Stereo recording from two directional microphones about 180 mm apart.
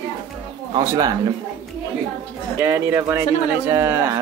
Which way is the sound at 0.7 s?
20° right (ahead or behind).